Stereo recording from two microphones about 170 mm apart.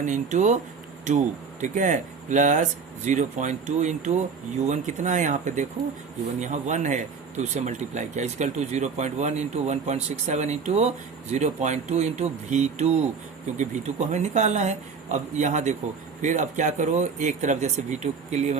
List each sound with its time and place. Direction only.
0.0 s speech: 45° right (ahead or behind)